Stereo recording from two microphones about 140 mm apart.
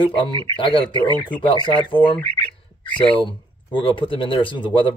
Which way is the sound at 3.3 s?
35° left (ahead or behind).